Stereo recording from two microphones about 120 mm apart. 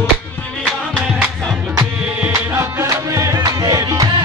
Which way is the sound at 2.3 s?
25° right (ahead or behind).